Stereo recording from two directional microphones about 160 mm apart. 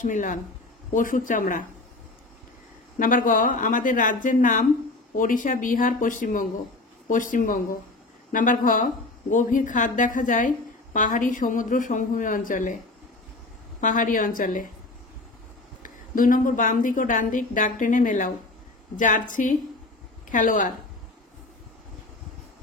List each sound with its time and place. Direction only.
0.0 s a woman's voice: 50° left (ahead or behind)
3.0 s a woman's voice: 60° left (ahead or behind)
13.7 s a woman's voice: 55° left (ahead or behind)
15.8 s a woman's voice: 55° left (ahead or behind)